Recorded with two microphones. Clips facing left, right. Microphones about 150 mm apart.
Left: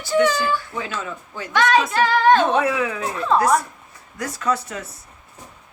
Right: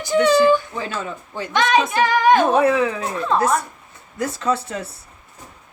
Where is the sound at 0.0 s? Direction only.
20° right (ahead or behind).